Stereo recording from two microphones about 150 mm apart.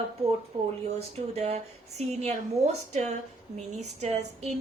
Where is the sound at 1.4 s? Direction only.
45° right (ahead or behind).